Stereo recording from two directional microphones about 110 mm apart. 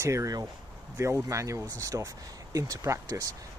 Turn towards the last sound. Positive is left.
turn(degrees=-30)  # may be behind; listen again after turning